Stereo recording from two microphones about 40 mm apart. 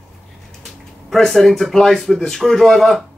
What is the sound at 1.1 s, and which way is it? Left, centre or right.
A man's voice, centre.